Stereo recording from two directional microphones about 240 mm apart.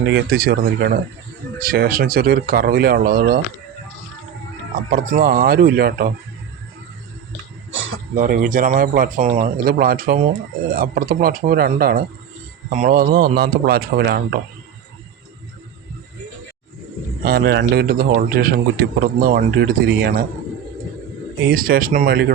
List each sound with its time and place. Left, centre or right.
0.0 s a man's voice: right
4.7 s a man's voice: right
7.7 s a sound: right
8.1 s a man's voice: right
17.2 s a man's voice: right
21.4 s a man's voice: right